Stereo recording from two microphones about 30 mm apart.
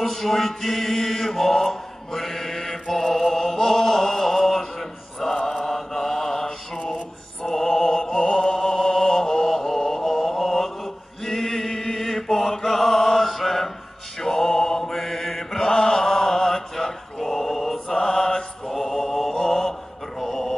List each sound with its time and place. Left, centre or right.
0.0 s mantra: centre
7.4 s music: centre
9.8 s chant: centre
11.2 s mantra: centre
14.2 s mantra: centre
14.9 s mantra: centre
15.7 s mantra: left
20.2 s music: centre